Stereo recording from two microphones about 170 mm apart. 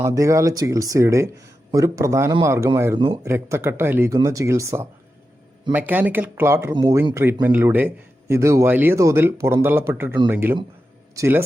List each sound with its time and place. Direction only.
0.0 s a man's voice: 15° right (ahead or behind)